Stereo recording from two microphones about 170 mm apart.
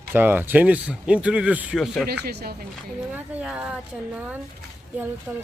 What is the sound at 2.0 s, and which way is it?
Speech, 65° right (ahead or behind).